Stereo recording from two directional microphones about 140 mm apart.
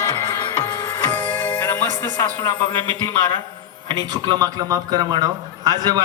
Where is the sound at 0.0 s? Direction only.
15° left (ahead or behind).